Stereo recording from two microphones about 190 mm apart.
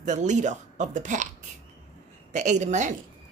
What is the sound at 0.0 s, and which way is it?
Speech, 40° right (ahead or behind).